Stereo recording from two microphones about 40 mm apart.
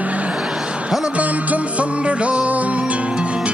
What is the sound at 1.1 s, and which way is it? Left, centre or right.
Music, right.